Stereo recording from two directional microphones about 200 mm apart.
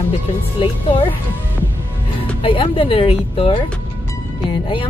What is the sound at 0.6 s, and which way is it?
Speech, 25° left (ahead or behind).